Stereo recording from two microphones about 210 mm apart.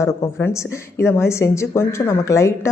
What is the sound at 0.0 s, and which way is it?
Speech, 10° left (ahead or behind).